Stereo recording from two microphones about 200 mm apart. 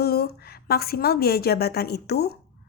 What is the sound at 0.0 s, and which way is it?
A woman's voice, 50° left (ahead or behind).